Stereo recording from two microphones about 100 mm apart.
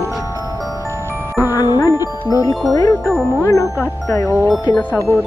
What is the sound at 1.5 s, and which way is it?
Music, 40° left (ahead or behind).